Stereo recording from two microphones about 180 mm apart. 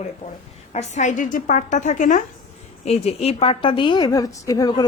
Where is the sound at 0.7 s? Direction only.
40° left (ahead or behind).